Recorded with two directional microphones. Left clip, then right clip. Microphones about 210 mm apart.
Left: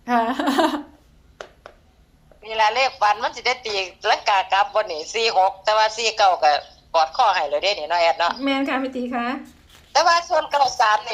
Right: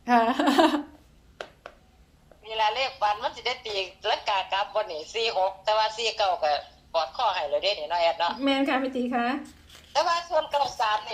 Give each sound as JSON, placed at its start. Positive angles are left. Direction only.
{"t": 0.0, "sound": "a sound", "side_deg": 0}
{"t": 2.4, "sound": "a woman's voice", "side_deg": 50}
{"t": 8.4, "sound": "a woman's voice", "side_deg": 5}
{"t": 9.9, "sound": "a woman's voice", "side_deg": 50}